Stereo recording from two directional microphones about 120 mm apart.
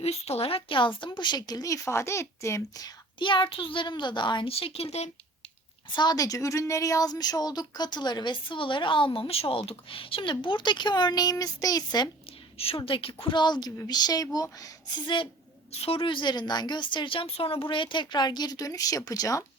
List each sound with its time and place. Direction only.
0.0 s speech: 60° left (ahead or behind)
5.9 s speech: 35° left (ahead or behind)
12.5 s a woman's voice: 55° left (ahead or behind); by 15.1 s 30° left (ahead or behind)
15.7 s speech: 55° left (ahead or behind); by 19.5 s 30° left (ahead or behind)